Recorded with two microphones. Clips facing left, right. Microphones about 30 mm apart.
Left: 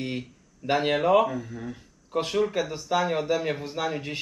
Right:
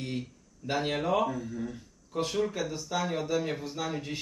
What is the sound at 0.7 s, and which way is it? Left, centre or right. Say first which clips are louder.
Speech: left 7 dB; left.